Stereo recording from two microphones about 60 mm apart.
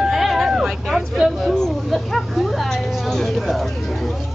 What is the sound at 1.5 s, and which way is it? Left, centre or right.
Speech, centre.